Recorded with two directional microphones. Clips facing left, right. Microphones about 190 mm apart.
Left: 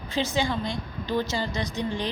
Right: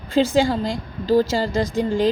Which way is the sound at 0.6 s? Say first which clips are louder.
Right 6 dB; 90° right.